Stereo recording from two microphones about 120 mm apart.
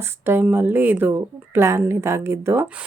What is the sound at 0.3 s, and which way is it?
Speech, 20° right (ahead or behind).